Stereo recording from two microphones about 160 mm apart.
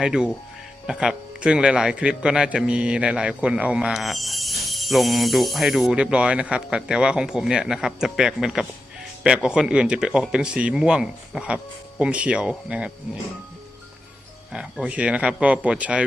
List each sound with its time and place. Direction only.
0.0 s a man's voice: 5° right (ahead or behind)
14.5 s speech: 5° right (ahead or behind)